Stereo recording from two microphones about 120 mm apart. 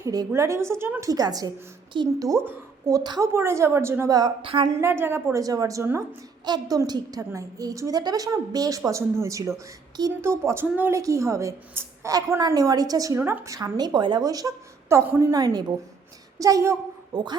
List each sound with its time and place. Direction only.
0.0 s a woman's voice: 30° right (ahead or behind)
1.1 s a woman's voice: 35° right (ahead or behind)
2.4 s a woman's voice: 15° right (ahead or behind)
2.9 s a woman's voice: 30° right (ahead or behind)
4.4 s a woman's voice: 45° right (ahead or behind)
4.8 s a woman's voice: 20° right (ahead or behind)
6.4 s a woman's voice: 35° right (ahead or behind)